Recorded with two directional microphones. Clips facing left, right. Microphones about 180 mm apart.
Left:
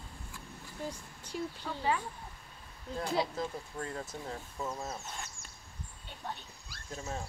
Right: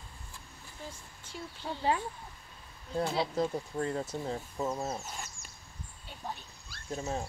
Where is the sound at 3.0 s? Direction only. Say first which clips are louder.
Right 2 dB; 30° right (ahead or behind).